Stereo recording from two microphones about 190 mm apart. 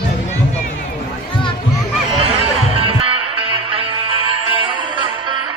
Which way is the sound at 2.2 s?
30° right (ahead or behind).